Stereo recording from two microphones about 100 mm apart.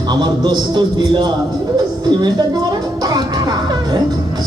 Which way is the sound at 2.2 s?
45° right (ahead or behind).